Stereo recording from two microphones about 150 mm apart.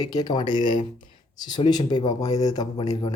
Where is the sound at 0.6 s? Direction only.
55° left (ahead or behind).